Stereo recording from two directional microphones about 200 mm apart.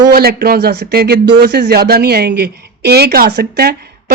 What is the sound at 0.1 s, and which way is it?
Speech, 50° right (ahead or behind).